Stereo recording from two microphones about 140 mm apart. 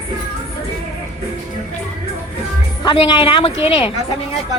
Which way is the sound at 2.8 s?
35° left (ahead or behind).